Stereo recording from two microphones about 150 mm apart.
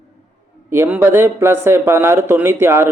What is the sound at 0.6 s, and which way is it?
Speech, 15° right (ahead or behind).